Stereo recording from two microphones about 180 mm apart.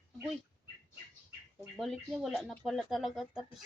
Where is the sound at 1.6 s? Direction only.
Centre (ahead or behind).